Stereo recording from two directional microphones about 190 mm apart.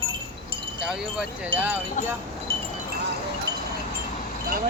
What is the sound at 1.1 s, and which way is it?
Wind chime, 5° right (ahead or behind).